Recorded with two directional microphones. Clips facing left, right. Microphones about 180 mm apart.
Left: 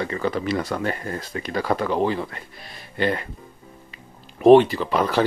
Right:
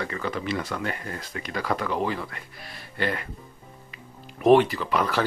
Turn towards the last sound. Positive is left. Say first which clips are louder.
# left 3 dB
turn(degrees=30)  # may be behind; listen again after turning